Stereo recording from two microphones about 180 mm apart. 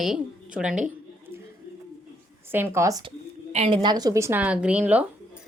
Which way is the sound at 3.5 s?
30° right (ahead or behind).